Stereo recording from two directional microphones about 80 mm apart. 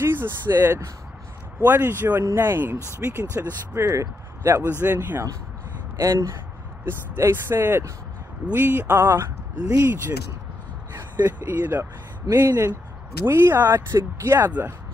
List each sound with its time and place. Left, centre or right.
0.0 s speech: right
5.9 s speech: right
11.0 s speech: right